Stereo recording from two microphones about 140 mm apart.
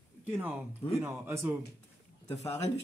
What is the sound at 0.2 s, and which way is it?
Speech, 10° right (ahead or behind).